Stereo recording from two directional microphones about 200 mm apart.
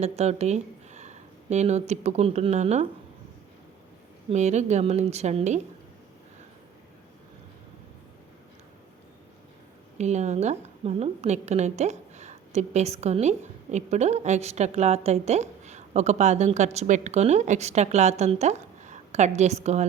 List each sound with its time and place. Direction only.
0.0 s a sound: 30° right (ahead or behind)
1.9 s a woman's voice: 35° right (ahead or behind)
4.3 s a woman's voice: 35° right (ahead or behind)
10.0 s a woman's voice: 35° right (ahead or behind)